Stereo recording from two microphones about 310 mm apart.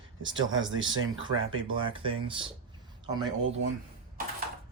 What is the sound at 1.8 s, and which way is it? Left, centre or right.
Speech, centre.